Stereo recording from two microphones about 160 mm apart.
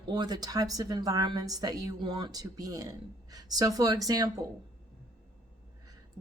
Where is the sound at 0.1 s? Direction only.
25° right (ahead or behind).